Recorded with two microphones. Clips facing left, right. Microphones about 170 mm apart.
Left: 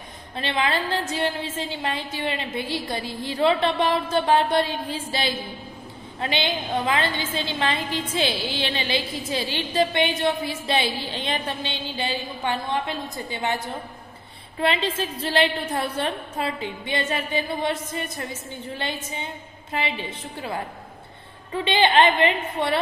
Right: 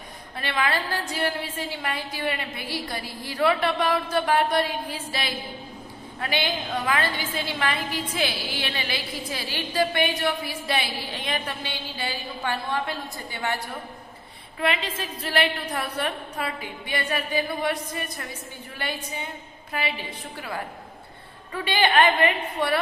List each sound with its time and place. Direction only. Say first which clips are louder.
0.3 s a woman's voice: left 2 dB; 25° left (ahead or behind)
14.6 s a woman's voice: left 3 dB; 30° left (ahead or behind)